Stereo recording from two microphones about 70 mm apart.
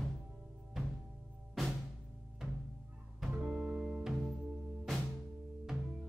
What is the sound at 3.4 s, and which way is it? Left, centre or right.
Music, centre.